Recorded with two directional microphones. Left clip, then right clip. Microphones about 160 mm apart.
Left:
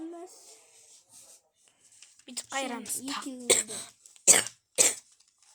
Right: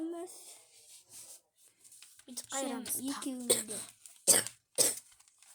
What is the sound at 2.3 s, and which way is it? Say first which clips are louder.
Speech: left 5 dB; 10° left (ahead or behind).